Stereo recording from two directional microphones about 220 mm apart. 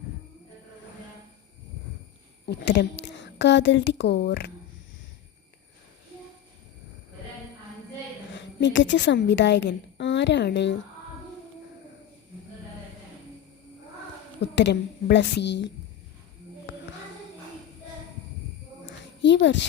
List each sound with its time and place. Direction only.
2.5 s speech: 50° left (ahead or behind)
8.3 s a woman's voice: 55° left (ahead or behind)
14.4 s a woman's voice: 50° left (ahead or behind)
19.2 s speech: 55° left (ahead or behind)